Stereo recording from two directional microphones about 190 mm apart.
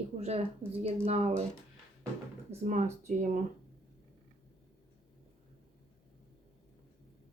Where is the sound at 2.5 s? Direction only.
35° right (ahead or behind).